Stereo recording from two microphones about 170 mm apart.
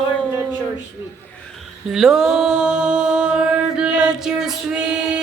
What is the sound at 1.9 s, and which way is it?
Mantra, 5° right (ahead or behind).